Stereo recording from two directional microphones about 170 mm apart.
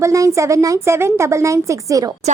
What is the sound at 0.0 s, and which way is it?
A woman's voice, 20° right (ahead or behind).